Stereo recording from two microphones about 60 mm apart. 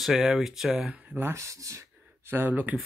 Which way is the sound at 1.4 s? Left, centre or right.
Right.